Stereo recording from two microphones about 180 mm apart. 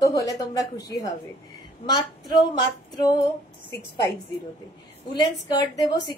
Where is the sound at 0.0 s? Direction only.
20° left (ahead or behind).